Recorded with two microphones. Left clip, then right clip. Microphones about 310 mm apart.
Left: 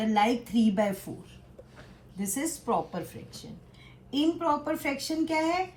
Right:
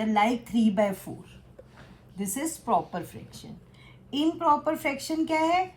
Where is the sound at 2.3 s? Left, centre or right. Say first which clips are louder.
Right 3 dB; centre.